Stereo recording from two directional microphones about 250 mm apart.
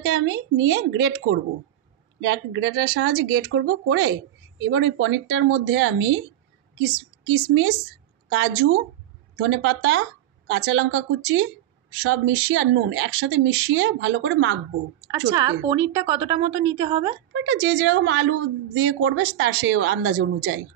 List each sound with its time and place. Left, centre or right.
0.0 s a woman's voice: right
15.6 s speech: centre
17.3 s speech: right